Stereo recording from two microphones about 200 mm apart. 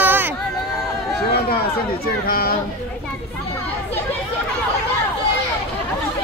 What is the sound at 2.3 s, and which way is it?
Chatter, 50° left (ahead or behind).